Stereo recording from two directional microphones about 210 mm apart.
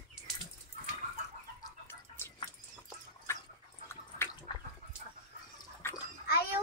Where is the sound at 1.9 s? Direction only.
10° left (ahead or behind).